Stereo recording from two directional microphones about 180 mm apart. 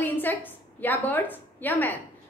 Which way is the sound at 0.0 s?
10° left (ahead or behind).